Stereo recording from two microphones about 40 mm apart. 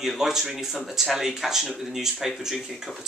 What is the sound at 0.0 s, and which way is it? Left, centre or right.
Speech, centre.